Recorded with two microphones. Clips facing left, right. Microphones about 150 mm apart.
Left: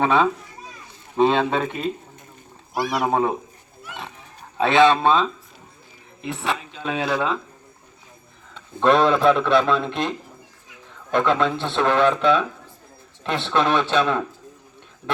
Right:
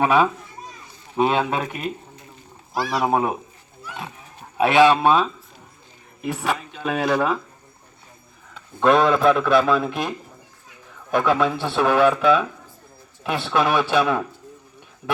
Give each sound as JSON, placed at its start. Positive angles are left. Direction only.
{"t": 0.0, "sound": "speech", "side_deg": -10}
{"t": 2.7, "sound": "speech", "side_deg": 20}
{"t": 3.0, "sound": "speech", "side_deg": -10}
{"t": 4.5, "sound": "speech", "side_deg": -10}
{"t": 8.5, "sound": "speech", "side_deg": 0}